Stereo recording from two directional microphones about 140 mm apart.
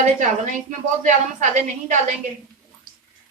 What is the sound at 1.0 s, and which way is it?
Speech, 60° right (ahead or behind).